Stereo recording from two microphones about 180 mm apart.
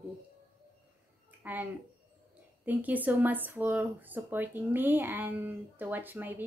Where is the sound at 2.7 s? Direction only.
10° right (ahead or behind).